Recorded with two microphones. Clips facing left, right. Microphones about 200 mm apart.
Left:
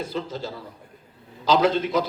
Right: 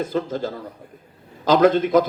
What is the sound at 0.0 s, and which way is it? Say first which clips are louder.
A man's voice: right 6 dB; 50° right (ahead or behind).